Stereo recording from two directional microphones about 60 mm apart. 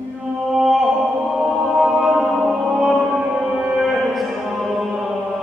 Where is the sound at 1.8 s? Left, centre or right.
Centre.